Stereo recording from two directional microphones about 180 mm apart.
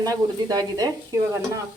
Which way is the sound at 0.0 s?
20° right (ahead or behind).